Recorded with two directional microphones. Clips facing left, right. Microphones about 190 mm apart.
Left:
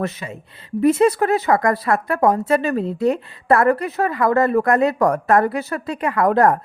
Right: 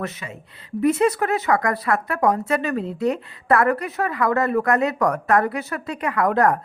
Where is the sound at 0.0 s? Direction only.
30° left (ahead or behind).